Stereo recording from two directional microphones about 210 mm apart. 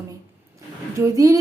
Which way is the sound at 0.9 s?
15° right (ahead or behind).